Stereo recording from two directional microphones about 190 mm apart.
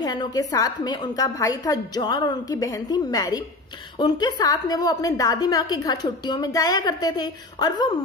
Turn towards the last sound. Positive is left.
turn(degrees=20)  # may be behind; listen again after turning